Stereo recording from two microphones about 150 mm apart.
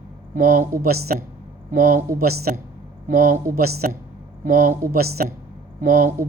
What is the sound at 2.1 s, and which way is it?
Speech, 90° right.